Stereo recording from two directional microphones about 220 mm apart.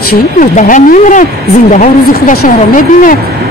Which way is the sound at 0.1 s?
40° left (ahead or behind).